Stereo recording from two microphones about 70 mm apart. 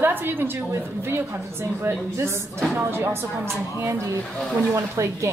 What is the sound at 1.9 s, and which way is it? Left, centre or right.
Speech, right.